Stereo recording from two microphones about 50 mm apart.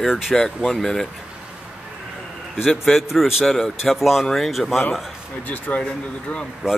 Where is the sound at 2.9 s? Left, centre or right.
Centre.